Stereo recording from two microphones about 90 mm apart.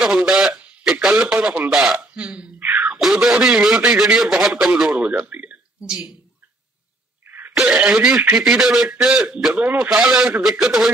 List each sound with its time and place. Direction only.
0.0 s radio: 5° right (ahead or behind)
1.3 s speech: 15° right (ahead or behind)
1.7 s hiccup: 5° right (ahead or behind)
2.9 s a man's voice: centre (ahead or behind)
5.0 s speech: 15° right (ahead or behind)
7.2 s throat clearing: 20° right (ahead or behind)
7.5 s a man's voice: 5° right (ahead or behind)